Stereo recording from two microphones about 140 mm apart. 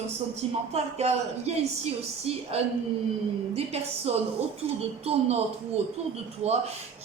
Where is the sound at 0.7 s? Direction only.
50° right (ahead or behind).